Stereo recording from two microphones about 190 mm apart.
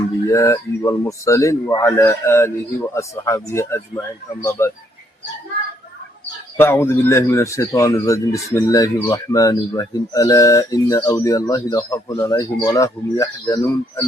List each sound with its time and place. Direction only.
0.3 s speech: 15° left (ahead or behind)
6.6 s speech: 10° left (ahead or behind)